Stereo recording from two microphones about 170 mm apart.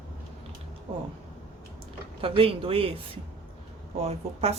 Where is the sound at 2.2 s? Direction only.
35° right (ahead or behind).